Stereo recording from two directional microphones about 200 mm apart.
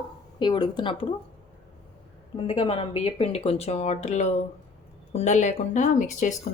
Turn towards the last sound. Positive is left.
turn(degrees=40)  # may be behind; listen again after turning